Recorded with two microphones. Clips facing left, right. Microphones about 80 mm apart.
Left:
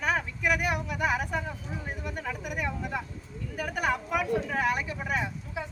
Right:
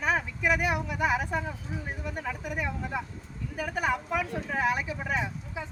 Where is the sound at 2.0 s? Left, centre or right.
Centre.